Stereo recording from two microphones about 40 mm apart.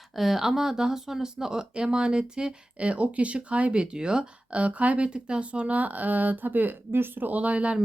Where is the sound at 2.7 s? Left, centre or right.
Right.